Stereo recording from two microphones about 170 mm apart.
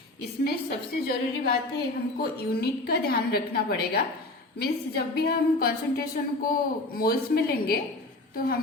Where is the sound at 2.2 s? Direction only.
65° left (ahead or behind).